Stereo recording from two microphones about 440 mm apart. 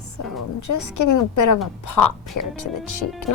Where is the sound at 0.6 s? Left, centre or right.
Left.